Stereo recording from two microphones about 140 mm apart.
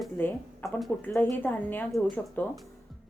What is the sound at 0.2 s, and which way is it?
Speech, 15° left (ahead or behind).